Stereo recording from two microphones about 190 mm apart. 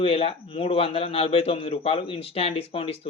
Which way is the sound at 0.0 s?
30° left (ahead or behind).